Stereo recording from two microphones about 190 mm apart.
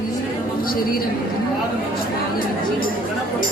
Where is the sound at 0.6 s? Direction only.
50° left (ahead or behind).